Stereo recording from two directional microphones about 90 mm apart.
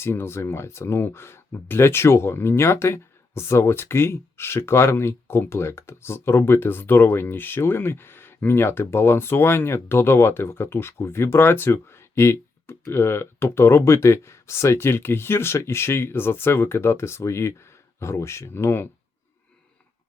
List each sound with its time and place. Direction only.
0.0 s speech: 30° left (ahead or behind)